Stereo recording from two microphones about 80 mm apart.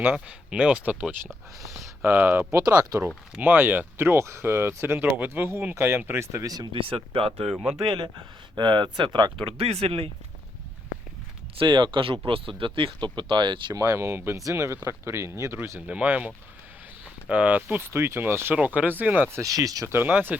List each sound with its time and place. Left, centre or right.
0.0 s speech: right
2.6 s speech: right
3.3 s speech: right
6.4 s speech: right
7.5 s speech: centre
8.5 s speech: right
11.6 s speech: right
13.7 s speech: right
15.9 s speech: centre
18.5 s speech: centre
19.3 s speech: right
19.9 s speech: right